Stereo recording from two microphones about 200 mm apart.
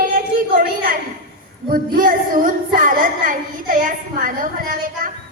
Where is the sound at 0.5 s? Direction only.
50° right (ahead or behind).